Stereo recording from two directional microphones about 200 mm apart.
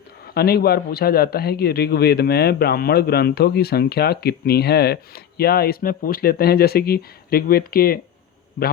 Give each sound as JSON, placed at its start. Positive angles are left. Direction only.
{"t": 0.3, "sound": "a man's voice", "side_deg": 50}